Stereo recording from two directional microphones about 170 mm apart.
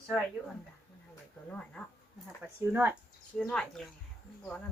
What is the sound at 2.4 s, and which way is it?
Speech, 10° right (ahead or behind).